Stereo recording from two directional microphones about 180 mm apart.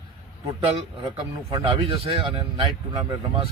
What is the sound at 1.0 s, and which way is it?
A man's voice, 30° right (ahead or behind).